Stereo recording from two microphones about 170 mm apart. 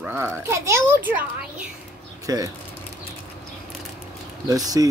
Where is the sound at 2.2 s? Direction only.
20° right (ahead or behind).